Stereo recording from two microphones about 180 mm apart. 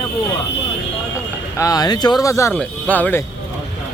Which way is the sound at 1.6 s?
20° left (ahead or behind).